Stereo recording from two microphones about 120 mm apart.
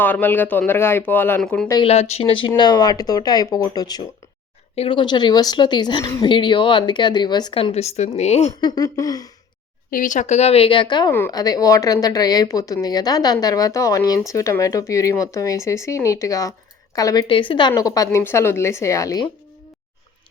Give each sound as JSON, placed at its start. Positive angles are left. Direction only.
{"t": 0.0, "sound": "speech", "side_deg": 15}
{"t": 1.8, "sound": "speech", "side_deg": 60}
{"t": 2.6, "sound": "speech", "side_deg": 35}
{"t": 4.7, "sound": "speech", "side_deg": 60}
{"t": 4.9, "sound": "speech", "side_deg": 40}
{"t": 6.2, "sound": "speech", "side_deg": 40}
{"t": 7.5, "sound": "speech", "side_deg": 55}
{"t": 8.6, "sound": "speech", "side_deg": 30}
{"t": 10.0, "sound": "speech", "side_deg": 90}
{"t": 17.2, "sound": "speech", "side_deg": 45}